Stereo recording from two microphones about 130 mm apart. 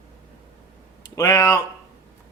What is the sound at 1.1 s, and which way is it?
Speech, 25° left (ahead or behind).